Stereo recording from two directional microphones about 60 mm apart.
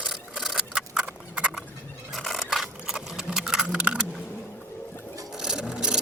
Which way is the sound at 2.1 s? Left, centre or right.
Centre.